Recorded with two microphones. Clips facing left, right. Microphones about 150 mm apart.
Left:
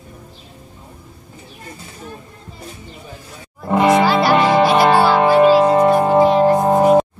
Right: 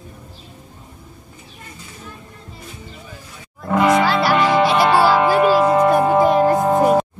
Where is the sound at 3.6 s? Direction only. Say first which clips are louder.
Left 2 dB; 30° left (ahead or behind).